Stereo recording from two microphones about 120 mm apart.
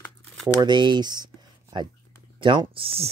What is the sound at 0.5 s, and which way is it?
Speech, 40° right (ahead or behind).